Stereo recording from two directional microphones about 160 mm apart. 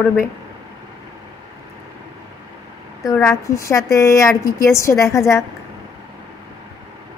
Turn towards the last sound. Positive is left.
turn(degrees=20)  # may be behind; listen again after turning